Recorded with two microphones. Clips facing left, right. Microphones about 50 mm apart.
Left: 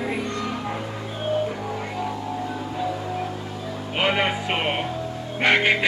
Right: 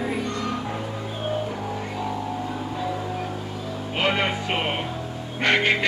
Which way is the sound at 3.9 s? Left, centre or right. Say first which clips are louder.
Left 1 dB; centre.